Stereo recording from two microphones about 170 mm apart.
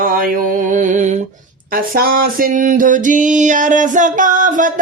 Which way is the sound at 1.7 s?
60° right (ahead or behind).